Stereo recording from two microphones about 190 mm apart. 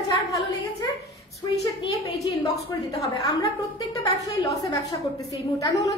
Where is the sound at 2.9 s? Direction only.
20° left (ahead or behind).